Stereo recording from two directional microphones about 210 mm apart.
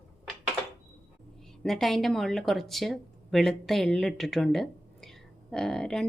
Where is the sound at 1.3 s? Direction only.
Centre (ahead or behind).